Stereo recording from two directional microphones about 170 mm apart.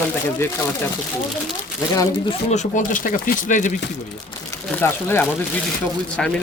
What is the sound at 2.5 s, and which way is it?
Speech, 45° left (ahead or behind).